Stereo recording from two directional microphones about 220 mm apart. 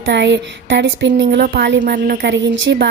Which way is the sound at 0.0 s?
55° right (ahead or behind).